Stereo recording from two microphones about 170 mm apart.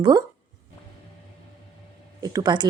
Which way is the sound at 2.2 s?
25° right (ahead or behind).